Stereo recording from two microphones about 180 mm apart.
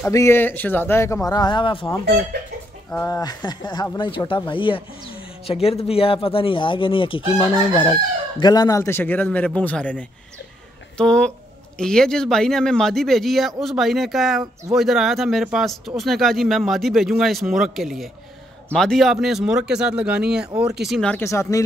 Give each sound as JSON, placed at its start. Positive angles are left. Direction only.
{"t": 0.0, "sound": "speech", "side_deg": 15}
{"t": 2.9, "sound": "speech", "side_deg": 15}